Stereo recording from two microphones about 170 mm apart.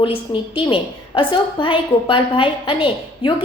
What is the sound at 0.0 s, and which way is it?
A woman's voice, 30° left (ahead or behind).